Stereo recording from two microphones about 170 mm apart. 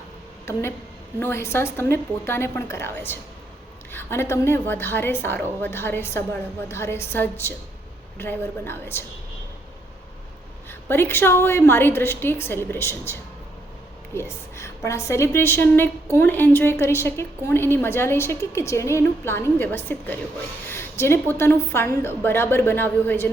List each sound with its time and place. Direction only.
0.5 s a woman's voice: 15° left (ahead or behind)
10.7 s a woman's voice: 15° left (ahead or behind)